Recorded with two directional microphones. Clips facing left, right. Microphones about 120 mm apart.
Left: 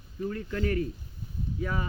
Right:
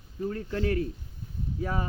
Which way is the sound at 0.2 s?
30° right (ahead or behind).